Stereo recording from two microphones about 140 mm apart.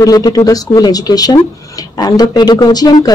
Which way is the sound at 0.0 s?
25° left (ahead or behind).